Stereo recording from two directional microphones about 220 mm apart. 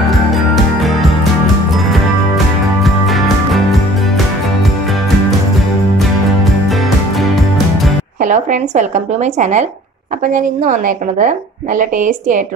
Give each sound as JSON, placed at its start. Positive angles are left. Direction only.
{"t": 1.9, "sound": "music", "side_deg": 0}
{"t": 7.2, "sound": "music", "side_deg": 0}
{"t": 8.2, "sound": "a woman's voice", "side_deg": -35}